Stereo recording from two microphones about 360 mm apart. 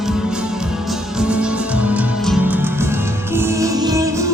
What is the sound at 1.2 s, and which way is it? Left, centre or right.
Music, centre.